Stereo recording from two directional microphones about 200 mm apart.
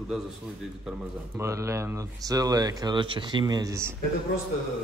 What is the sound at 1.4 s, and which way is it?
Speech, 15° right (ahead or behind).